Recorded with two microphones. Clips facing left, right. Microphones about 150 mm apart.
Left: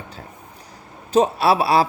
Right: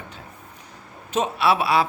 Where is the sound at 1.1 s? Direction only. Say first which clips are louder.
Left 5 dB; 35° left (ahead or behind).